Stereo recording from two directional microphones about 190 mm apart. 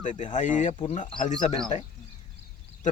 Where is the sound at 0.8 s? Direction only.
30° left (ahead or behind).